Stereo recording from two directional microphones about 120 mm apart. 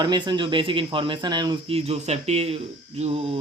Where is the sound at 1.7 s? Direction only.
55° right (ahead or behind).